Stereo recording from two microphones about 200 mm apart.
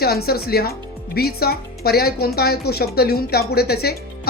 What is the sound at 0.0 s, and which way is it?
A woman's voice, 50° left (ahead or behind).